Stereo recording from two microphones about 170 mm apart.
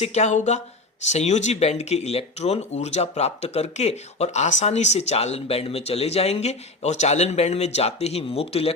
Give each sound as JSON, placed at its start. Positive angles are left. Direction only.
{"t": 0.0, "sound": "speech", "side_deg": 40}